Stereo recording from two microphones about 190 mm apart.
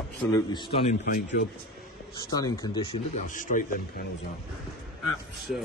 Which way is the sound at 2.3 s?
20° left (ahead or behind).